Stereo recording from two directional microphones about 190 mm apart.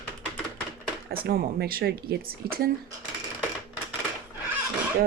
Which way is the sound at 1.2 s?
55° right (ahead or behind).